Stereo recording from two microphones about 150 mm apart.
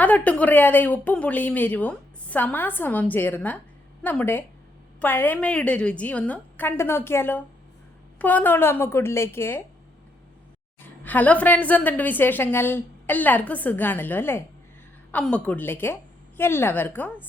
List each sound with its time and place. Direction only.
0.0 s speech: 10° left (ahead or behind)
11.0 s speech: 10° left (ahead or behind)